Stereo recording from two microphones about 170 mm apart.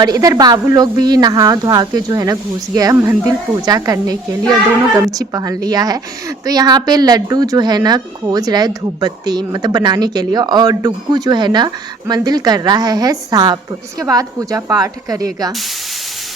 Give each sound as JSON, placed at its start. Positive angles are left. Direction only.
{"t": 0.0, "sound": "speech", "side_deg": -20}